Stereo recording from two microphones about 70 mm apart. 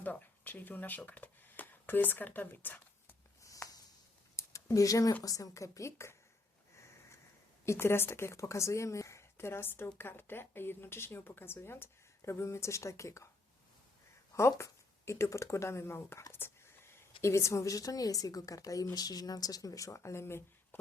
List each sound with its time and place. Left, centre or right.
0.0 s speech: left
3.4 s a sound: left
5.2 s speech: left
7.6 s a woman's voice: left
14.6 s speech: left
18.9 s speech: left